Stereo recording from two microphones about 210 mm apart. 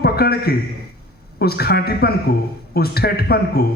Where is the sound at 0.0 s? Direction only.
45° left (ahead or behind).